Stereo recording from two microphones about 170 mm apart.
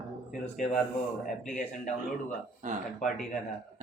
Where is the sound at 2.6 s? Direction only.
45° right (ahead or behind).